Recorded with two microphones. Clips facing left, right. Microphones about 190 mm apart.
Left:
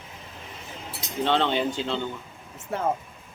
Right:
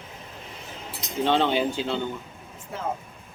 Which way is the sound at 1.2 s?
10° right (ahead or behind).